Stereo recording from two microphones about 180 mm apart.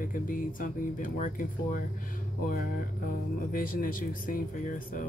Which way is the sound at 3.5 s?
50° left (ahead or behind).